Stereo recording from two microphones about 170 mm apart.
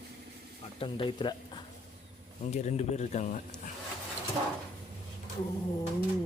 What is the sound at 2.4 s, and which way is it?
Speech, 40° left (ahead or behind).